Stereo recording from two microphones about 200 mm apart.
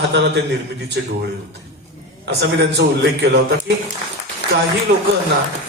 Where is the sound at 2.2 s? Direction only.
55° right (ahead or behind).